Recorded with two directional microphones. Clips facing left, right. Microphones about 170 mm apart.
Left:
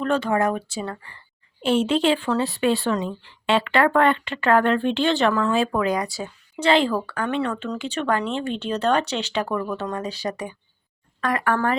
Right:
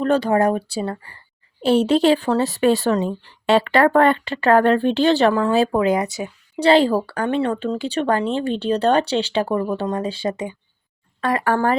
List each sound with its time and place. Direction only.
0.0 s speech: 35° right (ahead or behind); by 6.3 s 20° right (ahead or behind)
6.6 s speech: 35° right (ahead or behind)